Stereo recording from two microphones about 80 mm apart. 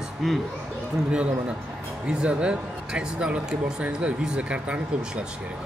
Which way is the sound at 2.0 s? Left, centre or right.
Centre.